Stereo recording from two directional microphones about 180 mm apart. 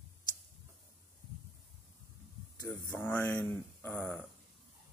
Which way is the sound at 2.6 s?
10° left (ahead or behind).